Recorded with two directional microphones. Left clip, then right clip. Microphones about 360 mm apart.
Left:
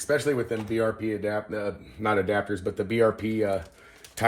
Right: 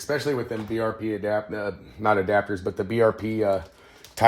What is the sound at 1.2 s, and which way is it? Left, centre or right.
Speech, centre.